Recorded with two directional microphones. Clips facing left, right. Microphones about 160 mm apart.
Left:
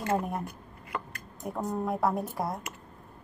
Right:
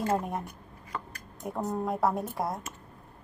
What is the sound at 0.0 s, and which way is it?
A woman's voice, centre (ahead or behind).